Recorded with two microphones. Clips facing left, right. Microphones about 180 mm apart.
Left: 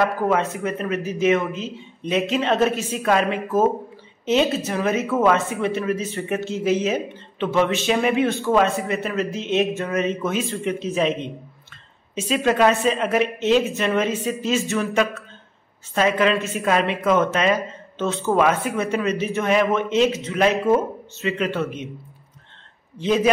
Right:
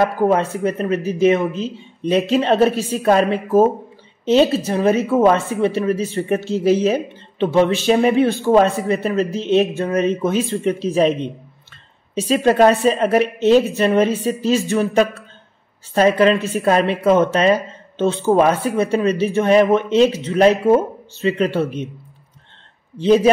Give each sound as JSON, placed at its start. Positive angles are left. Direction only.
{"t": 0.0, "sound": "a woman's voice", "side_deg": -35}
{"t": 12.2, "sound": "a woman's voice", "side_deg": -35}
{"t": 22.9, "sound": "a woman's voice", "side_deg": -30}